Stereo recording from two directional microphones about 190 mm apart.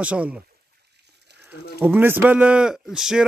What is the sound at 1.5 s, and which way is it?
A man's voice, 10° right (ahead or behind).